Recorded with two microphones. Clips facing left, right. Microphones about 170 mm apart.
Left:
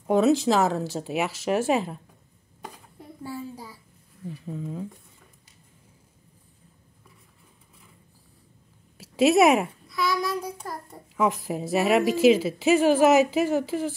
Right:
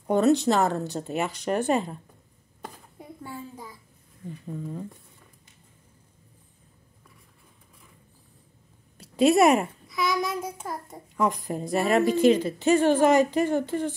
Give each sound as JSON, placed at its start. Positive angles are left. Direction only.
{"t": 0.0, "sound": "a woman's voice", "side_deg": 0}
{"t": 3.3, "sound": "a sound", "side_deg": 10}
{"t": 4.3, "sound": "a woman's voice", "side_deg": 0}
{"t": 8.9, "sound": "a sound", "side_deg": 5}
{"t": 10.0, "sound": "child singing", "side_deg": -20}
{"t": 11.1, "sound": "a woman's voice", "side_deg": 5}